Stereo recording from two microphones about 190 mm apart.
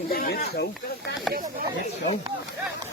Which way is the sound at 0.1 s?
55° left (ahead or behind).